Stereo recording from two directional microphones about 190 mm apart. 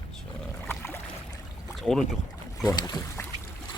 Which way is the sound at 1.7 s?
Centre (ahead or behind).